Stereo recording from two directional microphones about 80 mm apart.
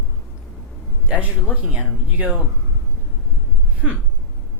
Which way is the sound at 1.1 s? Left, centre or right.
Centre.